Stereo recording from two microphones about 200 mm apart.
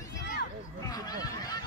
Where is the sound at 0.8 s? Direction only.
20° left (ahead or behind).